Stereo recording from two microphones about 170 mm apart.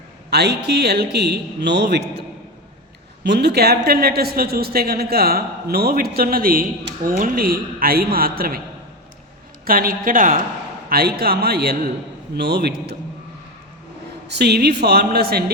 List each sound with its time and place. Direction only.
0.3 s speech: 75° right (ahead or behind)
3.2 s speech: 75° right (ahead or behind); by 8.6 s 60° right (ahead or behind)
9.6 s speech: 55° right (ahead or behind)
10.8 s speech: 65° right (ahead or behind)
14.3 s speech: 75° right (ahead or behind)